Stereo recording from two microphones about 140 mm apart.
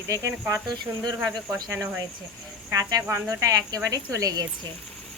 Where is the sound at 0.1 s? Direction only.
20° right (ahead or behind).